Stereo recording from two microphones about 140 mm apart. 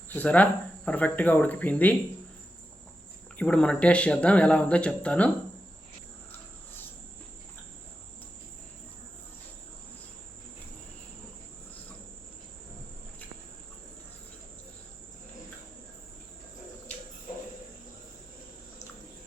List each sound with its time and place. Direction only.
0.1 s speech: 10° left (ahead or behind)
3.3 s speech: 5° left (ahead or behind)